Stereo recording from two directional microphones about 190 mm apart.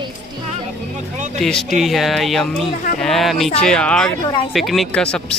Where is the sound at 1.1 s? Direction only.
40° right (ahead or behind).